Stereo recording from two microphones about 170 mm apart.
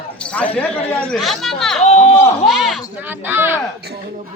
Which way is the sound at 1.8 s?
40° left (ahead or behind).